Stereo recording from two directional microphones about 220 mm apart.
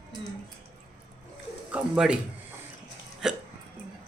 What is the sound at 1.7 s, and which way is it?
Speech, 5° right (ahead or behind).